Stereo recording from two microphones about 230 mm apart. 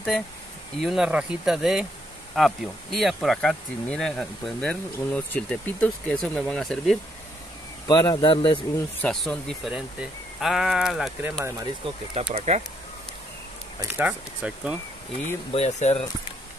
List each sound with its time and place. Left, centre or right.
0.7 s speech: centre
7.9 s speech: centre
9.0 s speech: centre
11.8 s speech: right
13.7 s speech: centre
15.5 s speech: left